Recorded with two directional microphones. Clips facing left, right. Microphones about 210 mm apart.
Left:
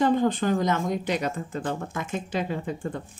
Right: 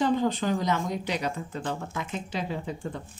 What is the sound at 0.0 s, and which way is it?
Speech, 50° left (ahead or behind).